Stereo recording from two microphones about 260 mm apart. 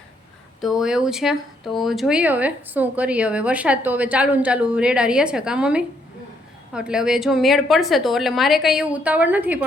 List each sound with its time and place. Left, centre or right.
0.6 s speech: centre